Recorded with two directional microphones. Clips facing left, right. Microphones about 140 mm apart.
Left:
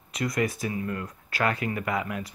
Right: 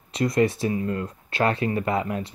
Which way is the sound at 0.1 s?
30° right (ahead or behind).